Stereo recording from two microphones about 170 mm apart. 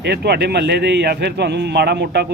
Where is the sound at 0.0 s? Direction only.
75° right (ahead or behind).